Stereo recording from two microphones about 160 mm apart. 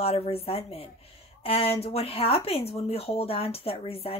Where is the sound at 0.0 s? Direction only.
40° left (ahead or behind).